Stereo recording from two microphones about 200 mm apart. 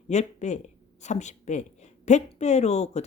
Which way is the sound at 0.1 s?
35° left (ahead or behind).